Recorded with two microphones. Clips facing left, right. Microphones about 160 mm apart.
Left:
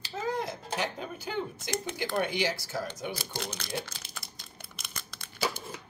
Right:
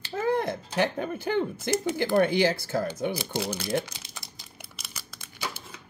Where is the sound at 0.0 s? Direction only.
55° right (ahead or behind).